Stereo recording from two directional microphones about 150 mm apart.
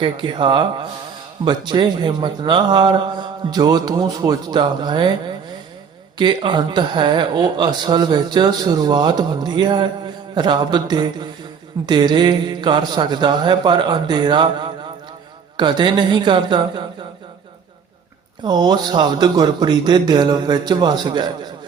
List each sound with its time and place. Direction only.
0.0 s a woman's voice: 35° right (ahead or behind)
18.4 s speech: 30° right (ahead or behind)